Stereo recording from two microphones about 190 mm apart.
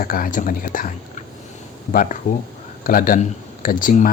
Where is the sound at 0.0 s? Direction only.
45° left (ahead or behind).